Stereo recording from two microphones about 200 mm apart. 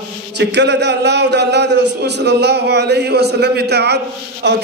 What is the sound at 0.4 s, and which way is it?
Speech, 60° right (ahead or behind).